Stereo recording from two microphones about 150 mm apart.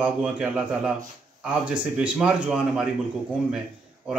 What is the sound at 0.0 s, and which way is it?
Speech, 10° right (ahead or behind).